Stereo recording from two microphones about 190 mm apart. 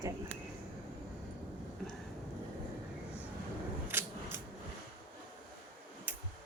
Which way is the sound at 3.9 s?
10° right (ahead or behind).